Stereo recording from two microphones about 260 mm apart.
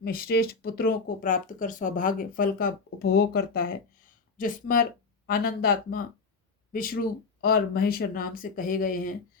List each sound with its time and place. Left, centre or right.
0.0 s speech: left